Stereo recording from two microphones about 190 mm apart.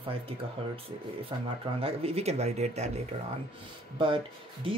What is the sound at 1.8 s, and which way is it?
Speech, 30° right (ahead or behind).